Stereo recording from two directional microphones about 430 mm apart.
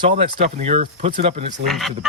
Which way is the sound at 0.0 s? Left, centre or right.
Centre.